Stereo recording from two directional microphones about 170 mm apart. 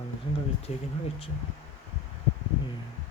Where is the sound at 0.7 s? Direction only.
35° left (ahead or behind).